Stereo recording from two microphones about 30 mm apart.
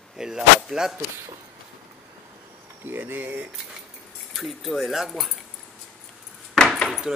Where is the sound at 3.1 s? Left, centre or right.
Right.